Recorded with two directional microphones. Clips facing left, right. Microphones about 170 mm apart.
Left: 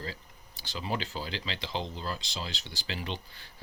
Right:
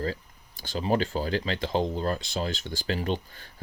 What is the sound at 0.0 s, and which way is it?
Speech, 50° right (ahead or behind).